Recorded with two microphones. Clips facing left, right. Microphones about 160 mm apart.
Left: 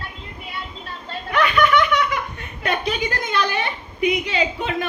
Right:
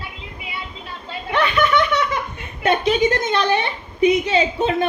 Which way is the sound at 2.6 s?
25° right (ahead or behind).